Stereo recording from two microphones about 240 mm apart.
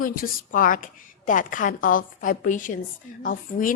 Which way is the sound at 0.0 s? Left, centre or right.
Left.